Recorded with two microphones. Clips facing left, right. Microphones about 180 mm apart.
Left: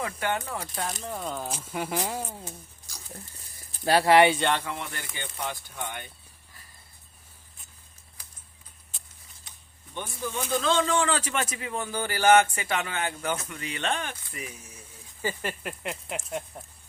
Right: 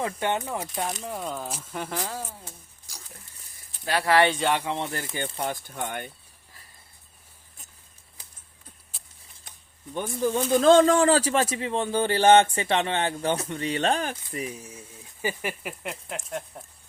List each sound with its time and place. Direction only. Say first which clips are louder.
0.0 s speech: right 3 dB; 20° right (ahead or behind)
1.0 s speech: right 1 dB; 5° right (ahead or behind)
1.8 s speech: left 2 dB; 15° left (ahead or behind)
3.8 s speech: left 3 dB; 25° left (ahead or behind)
4.3 s speech: even; centre (ahead or behind)
4.5 s speech: right 4 dB; 20° right (ahead or behind); by 6.1 s 50° right (ahead or behind)
8.2 s a sound: right 1 dB; 25° right (ahead or behind)
8.9 s a sound: even; centre (ahead or behind)
9.9 s speech: right 8 dB; 45° right (ahead or behind); by 14.8 s 30° right (ahead or behind)
15.2 s speech: right 1 dB; 15° right (ahead or behind)
15.8 s speech: left 1 dB; centre (ahead or behind)